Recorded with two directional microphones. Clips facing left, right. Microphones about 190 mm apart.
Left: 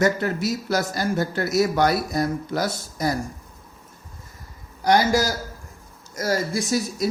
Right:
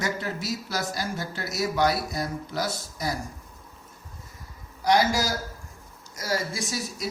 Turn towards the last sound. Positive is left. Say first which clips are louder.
# left 8 dB
turn(degrees=45)  # may be behind; listen again after turning